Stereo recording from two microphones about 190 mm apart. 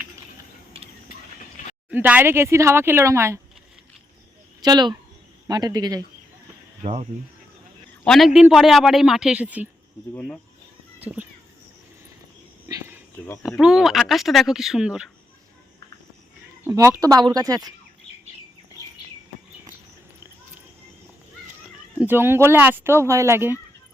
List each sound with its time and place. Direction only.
1.9 s speech: 10° right (ahead or behind)
4.6 s speech: 20° right (ahead or behind)
6.8 s speech: 30° right (ahead or behind)
8.0 s speech: centre (ahead or behind)
11.0 s speech: 10° right (ahead or behind)
12.6 s a sound: 15° right (ahead or behind)
13.4 s speech: 5° right (ahead or behind)
16.6 s speech: 15° right (ahead or behind)
21.9 s speech: 10° right (ahead or behind)